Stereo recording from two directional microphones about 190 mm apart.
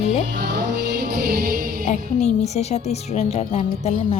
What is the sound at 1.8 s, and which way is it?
A woman's voice, 35° left (ahead or behind).